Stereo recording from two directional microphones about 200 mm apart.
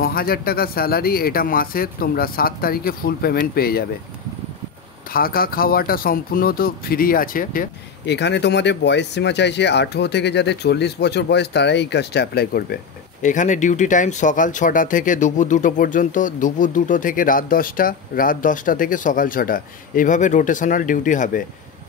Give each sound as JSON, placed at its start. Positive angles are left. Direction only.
{"t": 0.0, "sound": "speech", "side_deg": 50}
{"t": 5.1, "sound": "speech", "side_deg": 50}
{"t": 13.2, "sound": "speech", "side_deg": 40}